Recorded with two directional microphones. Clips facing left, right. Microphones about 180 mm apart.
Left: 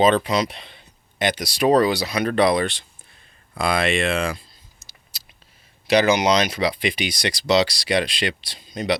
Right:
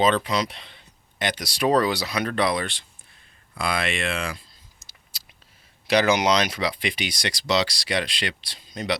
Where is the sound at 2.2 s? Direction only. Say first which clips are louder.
Left 7 dB; 20° left (ahead or behind).